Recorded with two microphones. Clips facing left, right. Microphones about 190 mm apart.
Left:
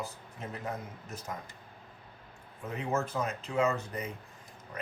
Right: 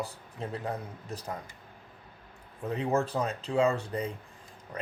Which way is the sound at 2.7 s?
35° right (ahead or behind).